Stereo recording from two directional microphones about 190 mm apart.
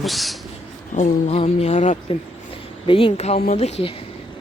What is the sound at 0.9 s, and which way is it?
Speech, 35° left (ahead or behind).